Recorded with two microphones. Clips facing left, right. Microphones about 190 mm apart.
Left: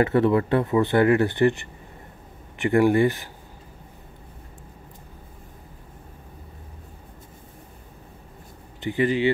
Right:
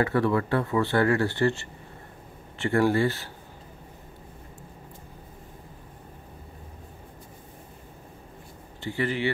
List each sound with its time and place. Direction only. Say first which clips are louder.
0.0 s speech: left 4 dB; 20° left (ahead or behind)
8.8 s speech: left 6 dB; 15° left (ahead or behind)